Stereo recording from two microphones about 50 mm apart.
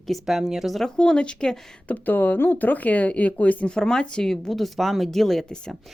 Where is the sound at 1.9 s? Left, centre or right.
Left.